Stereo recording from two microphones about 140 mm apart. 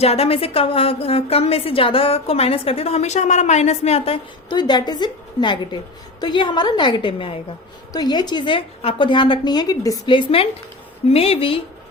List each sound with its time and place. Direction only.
0.0 s a woman's voice: 45° left (ahead or behind)